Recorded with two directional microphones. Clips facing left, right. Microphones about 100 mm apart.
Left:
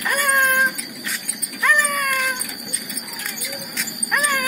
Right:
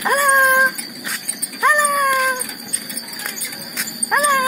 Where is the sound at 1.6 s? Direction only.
25° right (ahead or behind).